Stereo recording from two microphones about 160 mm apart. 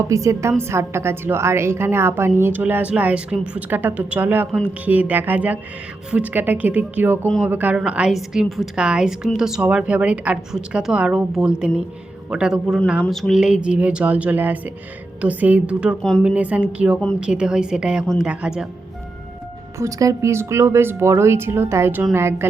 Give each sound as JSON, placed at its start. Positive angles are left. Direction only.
{"t": 0.0, "sound": "a woman's voice", "side_deg": -20}
{"t": 19.8, "sound": "a woman's voice", "side_deg": -20}